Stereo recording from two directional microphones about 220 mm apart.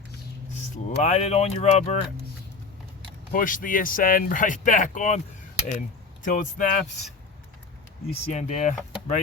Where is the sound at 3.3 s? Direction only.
40° left (ahead or behind).